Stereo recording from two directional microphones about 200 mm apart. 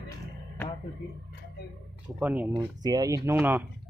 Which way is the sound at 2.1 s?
5° right (ahead or behind).